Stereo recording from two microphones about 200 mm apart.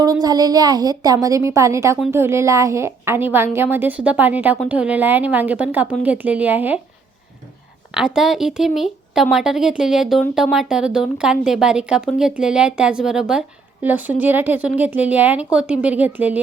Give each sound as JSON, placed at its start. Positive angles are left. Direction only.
{"t": 0.0, "sound": "speech", "side_deg": -20}
{"t": 7.9, "sound": "speech", "side_deg": -5}